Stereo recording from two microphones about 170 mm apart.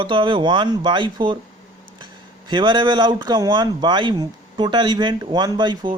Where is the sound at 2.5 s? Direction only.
30° right (ahead or behind).